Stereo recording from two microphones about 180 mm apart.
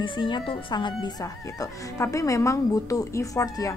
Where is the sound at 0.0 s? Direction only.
25° left (ahead or behind).